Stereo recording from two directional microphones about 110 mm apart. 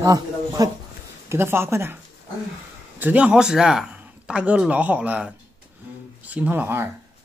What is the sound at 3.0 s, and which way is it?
Speech, 10° right (ahead or behind).